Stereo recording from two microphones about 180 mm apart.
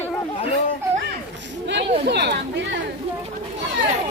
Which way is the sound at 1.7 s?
70° right (ahead or behind).